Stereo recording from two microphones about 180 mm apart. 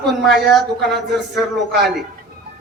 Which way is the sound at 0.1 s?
Centre (ahead or behind).